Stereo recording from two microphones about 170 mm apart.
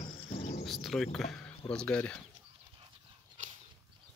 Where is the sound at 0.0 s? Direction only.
40° left (ahead or behind).